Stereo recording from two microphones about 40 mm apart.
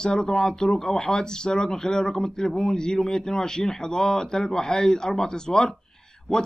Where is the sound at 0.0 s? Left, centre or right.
Centre.